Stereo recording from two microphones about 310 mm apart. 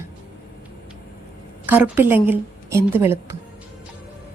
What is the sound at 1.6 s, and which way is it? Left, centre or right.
A woman's voice, centre.